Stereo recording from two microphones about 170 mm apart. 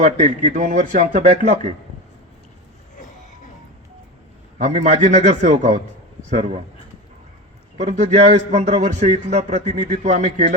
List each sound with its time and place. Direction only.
0.0 s a man's voice: 40° right (ahead or behind)
4.5 s a man's voice: 40° right (ahead or behind)
7.8 s a man's voice: 40° right (ahead or behind)